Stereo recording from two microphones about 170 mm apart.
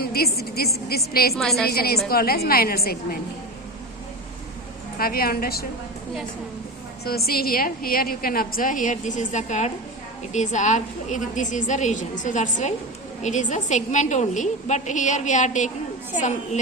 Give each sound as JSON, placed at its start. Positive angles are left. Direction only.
{"t": 0.0, "sound": "a woman's voice", "side_deg": 65}
{"t": 1.4, "sound": "a woman's voice", "side_deg": 0}
{"t": 1.6, "sound": "a woman's voice", "side_deg": 65}
{"t": 4.9, "sound": "a woman's voice", "side_deg": 60}
{"t": 7.0, "sound": "a woman's voice", "side_deg": 65}